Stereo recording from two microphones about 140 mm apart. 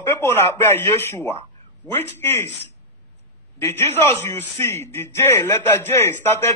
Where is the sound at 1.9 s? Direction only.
15° left (ahead or behind).